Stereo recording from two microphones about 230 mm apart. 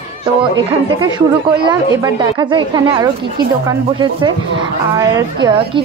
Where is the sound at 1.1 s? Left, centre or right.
Centre.